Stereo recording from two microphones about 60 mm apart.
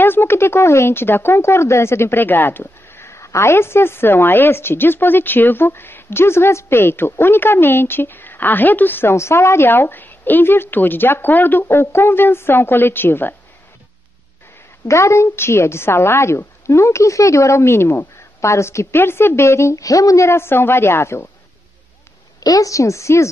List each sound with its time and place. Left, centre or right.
0.0 s a woman's voice: left
2.6 s a woman's voice: left
9.1 s a woman's voice: left
11.6 s a woman's voice: left
14.9 s a woman's voice: left
22.4 s a woman's voice: left